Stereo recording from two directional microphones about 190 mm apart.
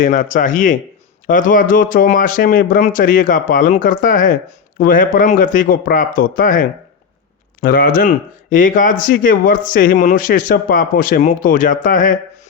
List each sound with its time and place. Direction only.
0.0 s speech: 45° left (ahead or behind)